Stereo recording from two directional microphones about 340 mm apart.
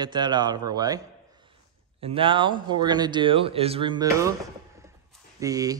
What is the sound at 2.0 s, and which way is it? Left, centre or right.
A man's voice, centre.